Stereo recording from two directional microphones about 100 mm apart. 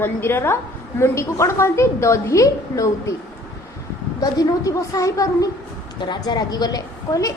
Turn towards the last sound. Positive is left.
turn(degrees=40)  # may be behind; listen again after turning